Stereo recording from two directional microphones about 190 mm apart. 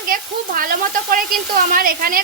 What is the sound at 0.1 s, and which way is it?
A woman's voice, 50° right (ahead or behind).